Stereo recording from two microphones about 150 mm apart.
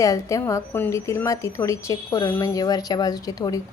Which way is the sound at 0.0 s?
20° left (ahead or behind).